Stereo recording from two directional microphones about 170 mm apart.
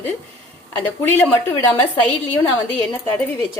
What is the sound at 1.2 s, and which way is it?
Speech, 10° left (ahead or behind).